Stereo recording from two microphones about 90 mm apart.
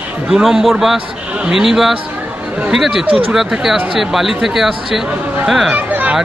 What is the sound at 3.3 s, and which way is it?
A man's voice, 5° right (ahead or behind).